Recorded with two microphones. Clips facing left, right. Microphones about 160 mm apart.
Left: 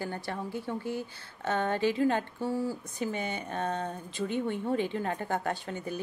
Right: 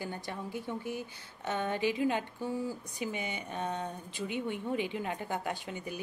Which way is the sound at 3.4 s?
55° left (ahead or behind).